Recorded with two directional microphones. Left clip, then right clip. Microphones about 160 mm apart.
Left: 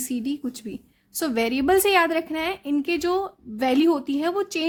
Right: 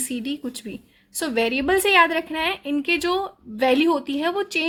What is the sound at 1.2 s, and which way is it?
A woman's voice, 45° left (ahead or behind).